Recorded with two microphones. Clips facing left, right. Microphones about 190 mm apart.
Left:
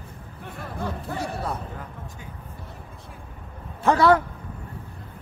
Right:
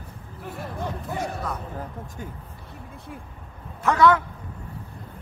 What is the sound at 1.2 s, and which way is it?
Speech, 30° left (ahead or behind).